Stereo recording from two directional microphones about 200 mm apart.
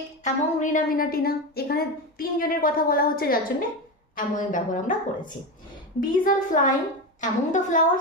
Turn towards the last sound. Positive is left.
turn(degrees=40)  # may be behind; listen again after turning